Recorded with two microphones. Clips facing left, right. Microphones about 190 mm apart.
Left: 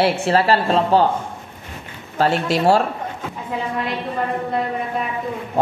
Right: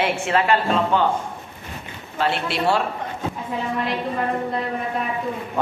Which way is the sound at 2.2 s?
40° left (ahead or behind).